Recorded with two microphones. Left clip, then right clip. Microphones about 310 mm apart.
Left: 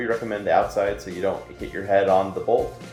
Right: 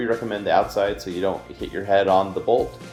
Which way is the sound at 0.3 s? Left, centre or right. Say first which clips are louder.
Even; centre.